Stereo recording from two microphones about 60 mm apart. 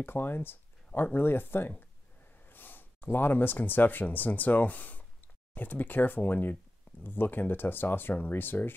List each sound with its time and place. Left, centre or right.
0.0 s speech: left